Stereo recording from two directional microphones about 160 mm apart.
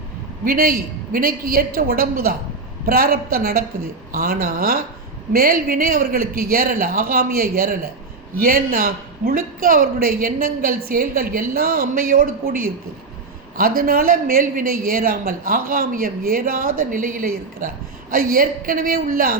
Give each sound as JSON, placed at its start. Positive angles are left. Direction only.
{"t": 0.4, "sound": "a woman's voice", "side_deg": -65}